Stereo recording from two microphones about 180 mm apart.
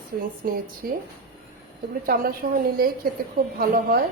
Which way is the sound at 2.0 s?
50° right (ahead or behind).